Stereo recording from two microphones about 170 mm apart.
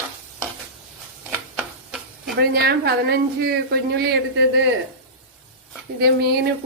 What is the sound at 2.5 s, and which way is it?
A woman's voice, 65° right (ahead or behind).